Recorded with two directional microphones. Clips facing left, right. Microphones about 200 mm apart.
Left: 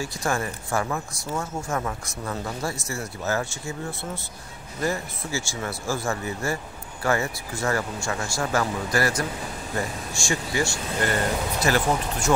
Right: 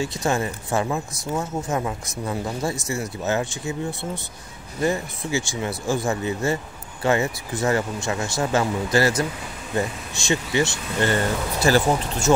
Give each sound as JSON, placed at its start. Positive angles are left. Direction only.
{"t": 0.0, "sound": "speech", "side_deg": -20}